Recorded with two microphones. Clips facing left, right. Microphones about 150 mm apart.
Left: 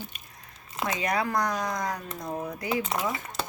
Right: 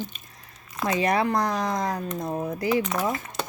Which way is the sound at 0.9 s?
25° right (ahead or behind).